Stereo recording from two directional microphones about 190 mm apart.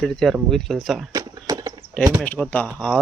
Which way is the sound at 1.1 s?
20° right (ahead or behind).